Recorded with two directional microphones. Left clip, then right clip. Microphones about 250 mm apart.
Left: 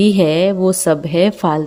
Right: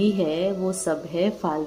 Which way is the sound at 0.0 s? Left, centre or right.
Left.